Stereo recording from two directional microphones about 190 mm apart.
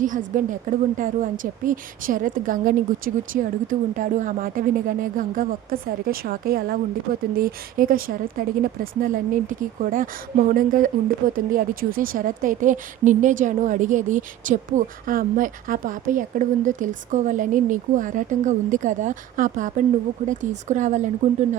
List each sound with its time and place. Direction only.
0.0 s a woman's voice: 45° right (ahead or behind)